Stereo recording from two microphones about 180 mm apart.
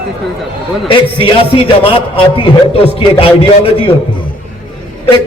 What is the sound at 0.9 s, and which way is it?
A man's voice, 30° left (ahead or behind).